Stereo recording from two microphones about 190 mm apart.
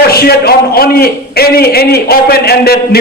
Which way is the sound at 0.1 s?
55° left (ahead or behind).